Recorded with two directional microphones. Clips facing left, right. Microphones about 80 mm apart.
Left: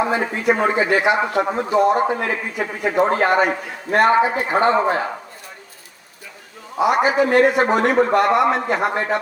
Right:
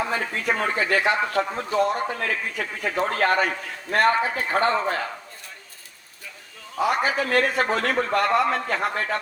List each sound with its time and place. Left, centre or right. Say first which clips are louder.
0.0 s a man's voice: left 7 dB; left
6.7 s a man's voice: left 6 dB; centre